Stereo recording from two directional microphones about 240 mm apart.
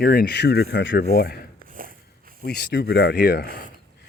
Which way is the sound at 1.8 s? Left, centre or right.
Right.